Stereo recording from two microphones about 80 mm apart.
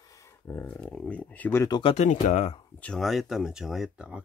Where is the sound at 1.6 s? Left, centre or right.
Left.